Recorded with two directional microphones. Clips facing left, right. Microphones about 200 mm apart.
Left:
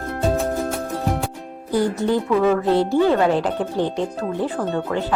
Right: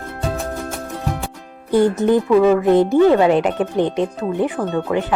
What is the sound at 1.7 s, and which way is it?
Speech, 20° right (ahead or behind).